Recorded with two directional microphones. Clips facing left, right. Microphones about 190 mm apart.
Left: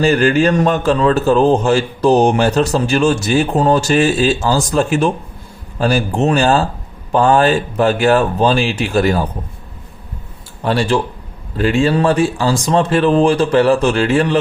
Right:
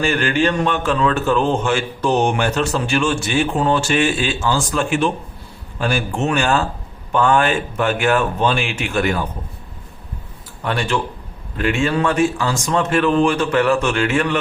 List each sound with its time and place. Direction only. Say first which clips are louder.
0.0 s a man's voice: left 6 dB; 40° left (ahead or behind)
10.6 s a man's voice: left 5 dB; 30° left (ahead or behind)